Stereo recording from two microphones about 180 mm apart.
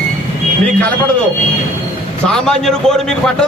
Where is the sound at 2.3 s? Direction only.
5° left (ahead or behind).